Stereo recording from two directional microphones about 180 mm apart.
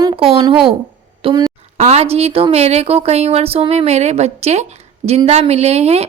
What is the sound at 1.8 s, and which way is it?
Speech, 35° right (ahead or behind).